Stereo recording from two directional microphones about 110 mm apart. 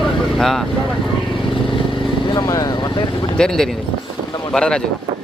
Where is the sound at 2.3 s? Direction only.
40° left (ahead or behind).